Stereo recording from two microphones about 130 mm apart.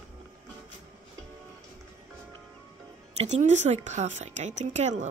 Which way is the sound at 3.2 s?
65° right (ahead or behind).